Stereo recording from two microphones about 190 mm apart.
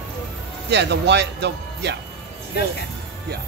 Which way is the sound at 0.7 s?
65° right (ahead or behind).